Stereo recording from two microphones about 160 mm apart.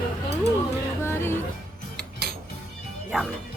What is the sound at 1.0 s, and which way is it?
Speech, 15° left (ahead or behind).